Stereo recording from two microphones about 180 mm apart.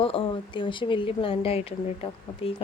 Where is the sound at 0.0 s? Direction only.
30° left (ahead or behind).